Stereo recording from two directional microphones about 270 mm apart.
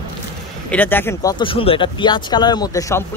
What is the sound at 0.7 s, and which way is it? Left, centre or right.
Speech, centre.